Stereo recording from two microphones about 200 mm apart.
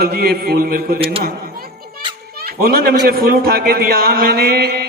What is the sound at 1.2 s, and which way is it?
Children playing, 50° right (ahead or behind).